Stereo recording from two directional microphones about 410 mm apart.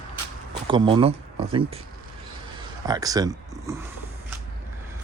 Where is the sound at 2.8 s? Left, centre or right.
Centre.